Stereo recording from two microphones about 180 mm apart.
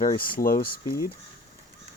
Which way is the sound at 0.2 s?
55° left (ahead or behind).